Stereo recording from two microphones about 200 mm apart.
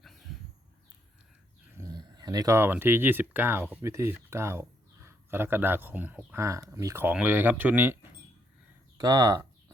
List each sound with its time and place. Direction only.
0.0 s a sound: centre (ahead or behind)
1.8 s speech: 20° right (ahead or behind)
9.0 s speech: 15° right (ahead or behind)